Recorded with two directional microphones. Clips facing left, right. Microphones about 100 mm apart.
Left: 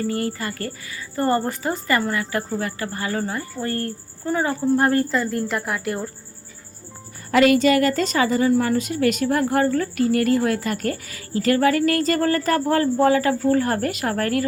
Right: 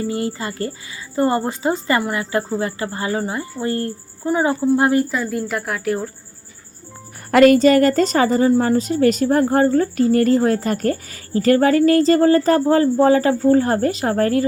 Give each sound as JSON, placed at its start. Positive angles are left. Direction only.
{"t": 0.0, "sound": "a woman's voice", "side_deg": -20}
{"t": 7.3, "sound": "a woman's voice", "side_deg": -50}